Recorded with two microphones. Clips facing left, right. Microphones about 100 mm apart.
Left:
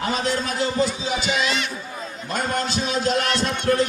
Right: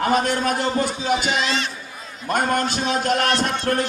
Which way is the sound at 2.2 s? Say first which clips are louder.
Right 4 dB; 50° right (ahead or behind).